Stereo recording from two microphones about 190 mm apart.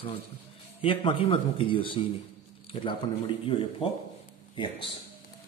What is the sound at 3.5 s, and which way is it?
Speech, 30° left (ahead or behind).